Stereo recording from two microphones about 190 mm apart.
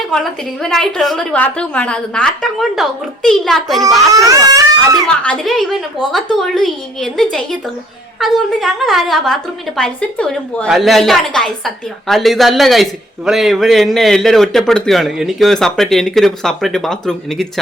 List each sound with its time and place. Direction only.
0.1 s a woman's voice: centre (ahead or behind)
4.1 s speech: 20° right (ahead or behind)
5.2 s a woman's voice: 5° left (ahead or behind)